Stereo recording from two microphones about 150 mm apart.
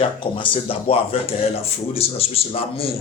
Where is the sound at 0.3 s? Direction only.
35° left (ahead or behind).